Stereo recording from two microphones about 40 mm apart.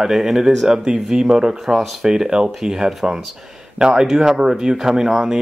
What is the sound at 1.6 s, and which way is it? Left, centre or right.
Speech, centre.